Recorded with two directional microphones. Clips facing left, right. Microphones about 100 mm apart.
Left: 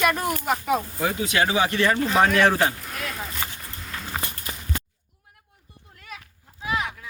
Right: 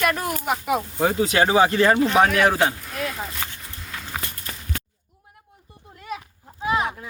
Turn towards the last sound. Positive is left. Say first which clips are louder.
# right 5 dB
turn(degrees=-30)  # may be behind; listen again after turning